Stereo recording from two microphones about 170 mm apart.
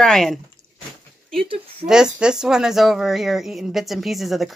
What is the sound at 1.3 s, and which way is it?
Speech, 30° right (ahead or behind).